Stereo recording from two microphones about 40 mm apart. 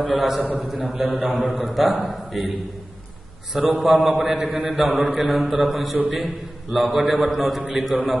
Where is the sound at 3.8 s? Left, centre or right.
Centre.